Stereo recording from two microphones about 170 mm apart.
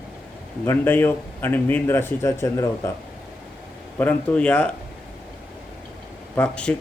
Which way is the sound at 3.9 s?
10° left (ahead or behind).